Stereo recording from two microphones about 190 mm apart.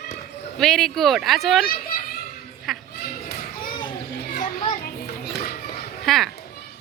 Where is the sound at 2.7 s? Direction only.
Centre (ahead or behind).